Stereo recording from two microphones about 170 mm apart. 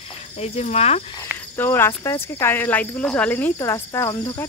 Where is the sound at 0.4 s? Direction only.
40° left (ahead or behind).